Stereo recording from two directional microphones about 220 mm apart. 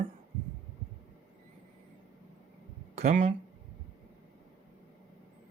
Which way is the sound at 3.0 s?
30° right (ahead or behind).